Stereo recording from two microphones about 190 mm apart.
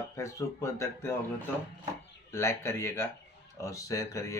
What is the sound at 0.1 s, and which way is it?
Speech, 15° left (ahead or behind).